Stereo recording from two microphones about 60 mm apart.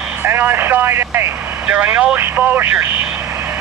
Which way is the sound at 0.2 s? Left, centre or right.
Right.